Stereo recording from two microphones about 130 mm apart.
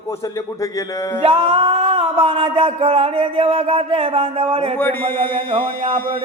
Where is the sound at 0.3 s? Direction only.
25° left (ahead or behind).